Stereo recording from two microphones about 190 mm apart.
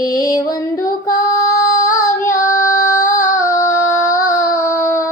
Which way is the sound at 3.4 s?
15° left (ahead or behind).